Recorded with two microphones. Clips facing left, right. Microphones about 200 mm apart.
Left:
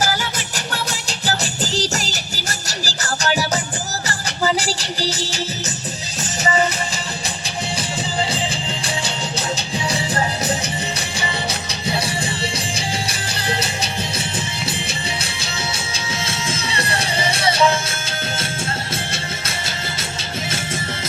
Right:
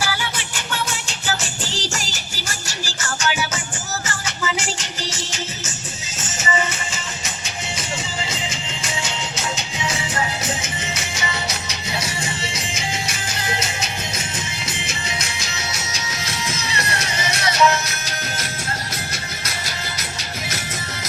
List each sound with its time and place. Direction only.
0.0 s music: 40° left (ahead or behind)
7.8 s music: 35° left (ahead or behind)
11.7 s music: 30° left (ahead or behind)
19.1 s music: 25° left (ahead or behind)